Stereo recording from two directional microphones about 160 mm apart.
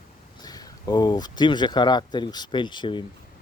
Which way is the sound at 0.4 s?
25° left (ahead or behind).